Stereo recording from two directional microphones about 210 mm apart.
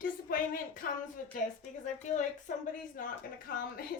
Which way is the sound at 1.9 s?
35° left (ahead or behind).